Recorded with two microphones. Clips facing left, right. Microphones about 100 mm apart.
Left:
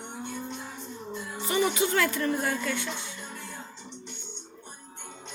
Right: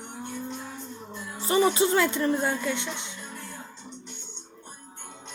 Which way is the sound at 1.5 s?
30° right (ahead or behind).